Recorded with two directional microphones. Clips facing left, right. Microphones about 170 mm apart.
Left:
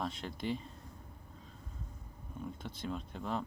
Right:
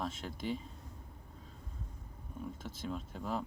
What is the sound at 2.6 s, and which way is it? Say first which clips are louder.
Speech: left 1 dB; centre (ahead or behind).